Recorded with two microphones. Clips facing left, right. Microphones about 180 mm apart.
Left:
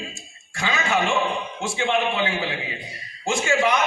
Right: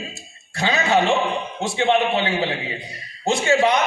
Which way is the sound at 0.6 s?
35° right (ahead or behind).